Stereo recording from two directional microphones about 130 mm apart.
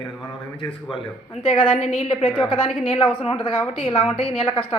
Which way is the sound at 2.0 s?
40° left (ahead or behind).